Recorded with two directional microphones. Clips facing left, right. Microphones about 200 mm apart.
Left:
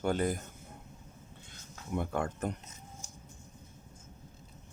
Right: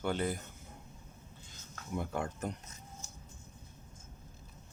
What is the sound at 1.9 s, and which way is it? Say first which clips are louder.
Speech: left 3 dB; 55° left (ahead or behind).